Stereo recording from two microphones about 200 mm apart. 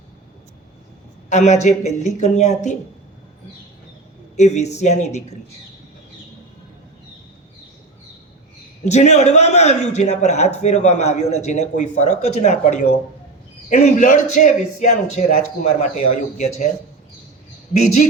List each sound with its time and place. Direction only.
1.3 s a man's voice: 35° left (ahead or behind)
4.4 s a man's voice: 35° left (ahead or behind)
8.8 s a man's voice: 35° left (ahead or behind)